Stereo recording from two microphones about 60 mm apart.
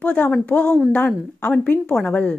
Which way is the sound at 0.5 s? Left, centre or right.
Centre.